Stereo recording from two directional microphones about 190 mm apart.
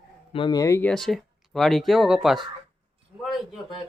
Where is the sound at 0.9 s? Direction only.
Centre (ahead or behind).